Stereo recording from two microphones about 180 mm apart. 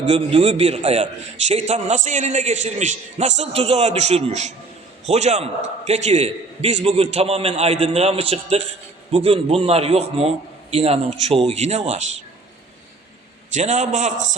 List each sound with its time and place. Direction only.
0.0 s a man's voice: 35° right (ahead or behind)
13.5 s a man's voice: 40° right (ahead or behind)